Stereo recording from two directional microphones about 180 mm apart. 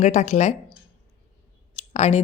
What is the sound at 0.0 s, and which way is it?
Speech, 40° left (ahead or behind).